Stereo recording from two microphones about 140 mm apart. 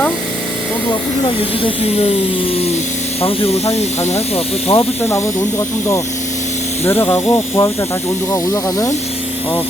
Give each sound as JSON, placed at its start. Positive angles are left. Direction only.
{"t": 3.2, "sound": "speech", "side_deg": 45}
{"t": 5.0, "sound": "speech", "side_deg": 20}
{"t": 6.8, "sound": "speech", "side_deg": 15}